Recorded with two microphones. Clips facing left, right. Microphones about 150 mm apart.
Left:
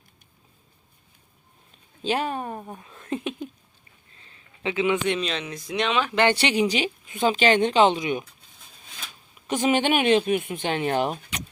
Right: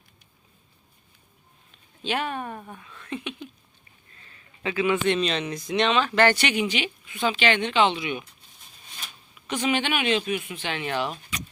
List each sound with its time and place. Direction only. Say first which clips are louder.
2.0 s speech: left 3 dB; 35° left (ahead or behind)
4.2 s a sound: left 1 dB; 25° left (ahead or behind)
5.0 s speech: right 2 dB; 5° left (ahead or behind)
6.3 s speech: left 3 dB; 30° left (ahead or behind)
9.5 s speech: left 4 dB; 45° left (ahead or behind); by 11.4 s 60° left (ahead or behind)